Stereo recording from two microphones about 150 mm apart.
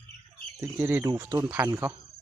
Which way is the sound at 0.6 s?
15° right (ahead or behind).